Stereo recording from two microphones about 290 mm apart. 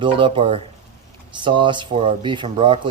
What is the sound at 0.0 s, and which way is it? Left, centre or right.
Speech, centre.